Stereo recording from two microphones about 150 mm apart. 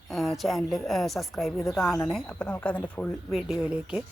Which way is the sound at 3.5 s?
5° right (ahead or behind).